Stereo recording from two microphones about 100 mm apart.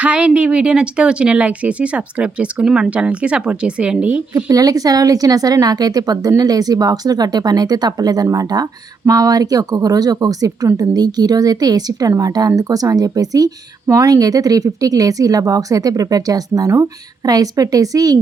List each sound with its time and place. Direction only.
0.0 s speech: 10° right (ahead or behind)
4.4 s speech: 35° right (ahead or behind)